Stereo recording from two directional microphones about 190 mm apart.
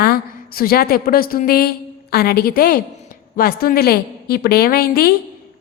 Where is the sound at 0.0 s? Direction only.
55° left (ahead or behind).